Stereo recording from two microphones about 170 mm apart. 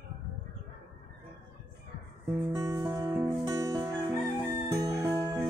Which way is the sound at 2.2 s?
15° right (ahead or behind).